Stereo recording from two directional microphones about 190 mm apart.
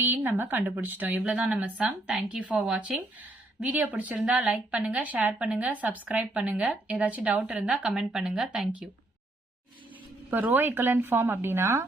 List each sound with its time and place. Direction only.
0.0 s speech: 10° right (ahead or behind)
10.2 s speech: 10° right (ahead or behind)